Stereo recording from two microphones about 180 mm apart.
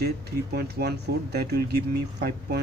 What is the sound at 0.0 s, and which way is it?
Speech, 60° right (ahead or behind).